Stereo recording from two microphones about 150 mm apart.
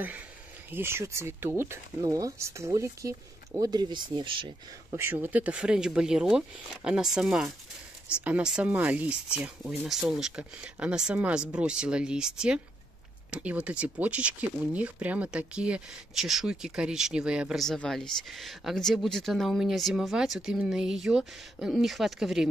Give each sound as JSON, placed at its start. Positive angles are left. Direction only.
{"t": 0.7, "sound": "speech", "side_deg": -15}
{"t": 4.9, "sound": "speech", "side_deg": -15}